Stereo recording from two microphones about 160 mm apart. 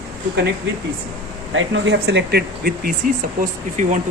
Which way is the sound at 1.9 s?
90° right.